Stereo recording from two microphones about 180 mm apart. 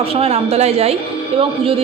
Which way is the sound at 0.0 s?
35° right (ahead or behind).